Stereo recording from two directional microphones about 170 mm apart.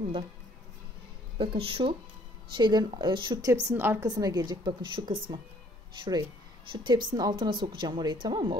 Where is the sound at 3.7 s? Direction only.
15° right (ahead or behind).